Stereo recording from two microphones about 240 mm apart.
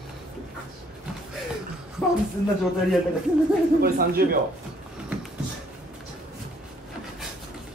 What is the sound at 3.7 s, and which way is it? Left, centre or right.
Speech, right.